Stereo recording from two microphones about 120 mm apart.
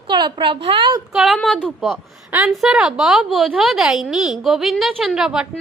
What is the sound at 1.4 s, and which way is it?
A woman's voice, 5° left (ahead or behind).